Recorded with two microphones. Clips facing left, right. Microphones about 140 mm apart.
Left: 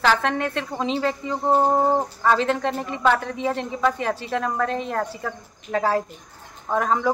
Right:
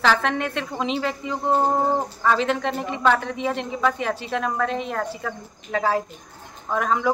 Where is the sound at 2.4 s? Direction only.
35° left (ahead or behind).